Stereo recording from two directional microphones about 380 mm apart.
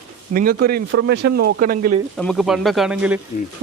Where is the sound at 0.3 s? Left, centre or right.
Right.